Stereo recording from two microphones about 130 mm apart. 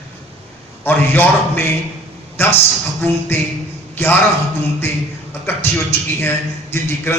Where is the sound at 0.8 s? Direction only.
15° left (ahead or behind).